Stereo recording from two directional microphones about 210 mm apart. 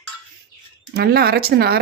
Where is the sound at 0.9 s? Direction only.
50° right (ahead or behind).